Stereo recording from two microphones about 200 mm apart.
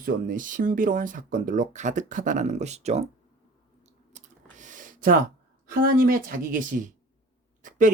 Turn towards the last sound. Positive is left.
turn(degrees=-40)  # may be behind; listen again after turning